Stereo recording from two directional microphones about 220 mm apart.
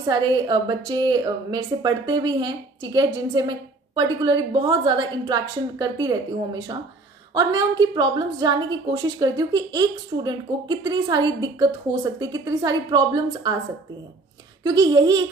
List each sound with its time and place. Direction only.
0.0 s a woman's voice: 20° right (ahead or behind)
14.6 s a woman's voice: 20° right (ahead or behind)